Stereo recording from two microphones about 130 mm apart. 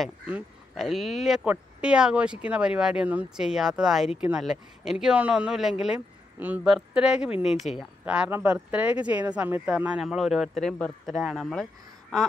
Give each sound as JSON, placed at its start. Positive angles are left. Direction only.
{"t": 0.7, "sound": "speech", "side_deg": 0}
{"t": 7.7, "sound": "speech", "side_deg": 50}
{"t": 8.0, "sound": "speech", "side_deg": -10}